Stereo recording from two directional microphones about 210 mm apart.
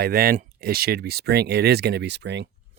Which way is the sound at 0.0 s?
45° right (ahead or behind).